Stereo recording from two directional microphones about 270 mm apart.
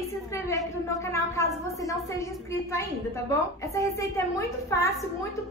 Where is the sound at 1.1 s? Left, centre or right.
Centre.